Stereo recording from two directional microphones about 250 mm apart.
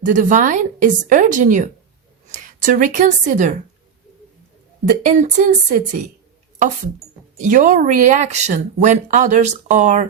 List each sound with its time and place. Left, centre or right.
0.0 s a woman's voice: right
5.0 s speech: right
7.5 s speech: right